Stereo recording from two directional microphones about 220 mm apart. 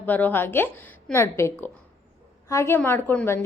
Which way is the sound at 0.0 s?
10° left (ahead or behind).